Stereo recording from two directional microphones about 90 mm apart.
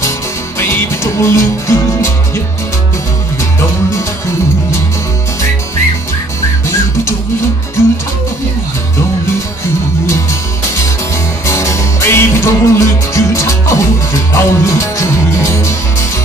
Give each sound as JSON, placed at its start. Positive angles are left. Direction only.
{"t": 0.6, "sound": "music", "side_deg": 30}
{"t": 11.4, "sound": "music", "side_deg": 35}